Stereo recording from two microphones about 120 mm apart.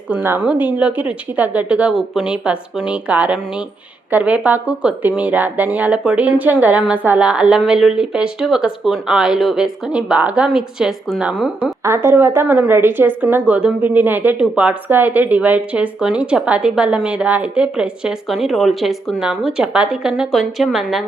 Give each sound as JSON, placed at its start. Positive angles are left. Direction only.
{"t": 0.1, "sound": "speech", "side_deg": -15}
{"t": 12.0, "sound": "speech", "side_deg": -20}